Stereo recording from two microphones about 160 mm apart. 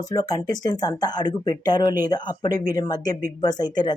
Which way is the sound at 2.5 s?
60° right (ahead or behind).